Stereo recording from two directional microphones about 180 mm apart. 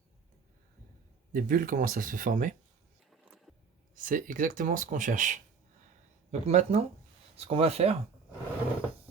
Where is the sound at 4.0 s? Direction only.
50° right (ahead or behind).